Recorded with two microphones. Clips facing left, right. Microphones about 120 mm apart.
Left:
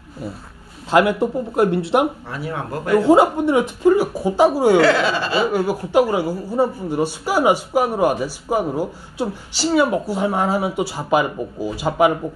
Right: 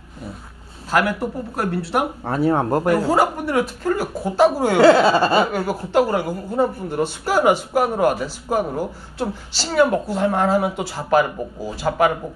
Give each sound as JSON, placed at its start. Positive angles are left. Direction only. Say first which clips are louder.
{"t": 0.8, "sound": "speech", "louder": "left 4 dB", "side_deg": 20}
{"t": 2.2, "sound": "speech", "louder": "right 9 dB", "side_deg": -45}
{"t": 3.0, "sound": "speech", "louder": "left 5 dB", "side_deg": 20}
{"t": 4.8, "sound": "speech", "louder": "right 5 dB", "side_deg": -35}
{"t": 5.5, "sound": "speech", "louder": "left 3 dB", "side_deg": 10}